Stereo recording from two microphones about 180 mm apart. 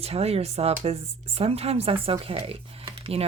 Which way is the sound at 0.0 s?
35° right (ahead or behind).